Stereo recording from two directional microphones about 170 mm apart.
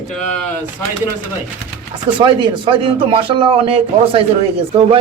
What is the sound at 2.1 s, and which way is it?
Speech, 30° right (ahead or behind).